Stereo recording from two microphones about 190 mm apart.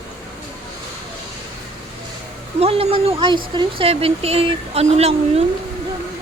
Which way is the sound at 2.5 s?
30° right (ahead or behind).